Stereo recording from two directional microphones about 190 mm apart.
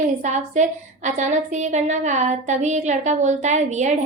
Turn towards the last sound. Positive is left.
turn(degrees=-40)  # may be behind; listen again after turning